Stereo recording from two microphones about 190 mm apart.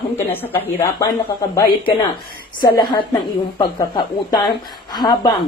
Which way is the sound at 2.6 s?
25° left (ahead or behind).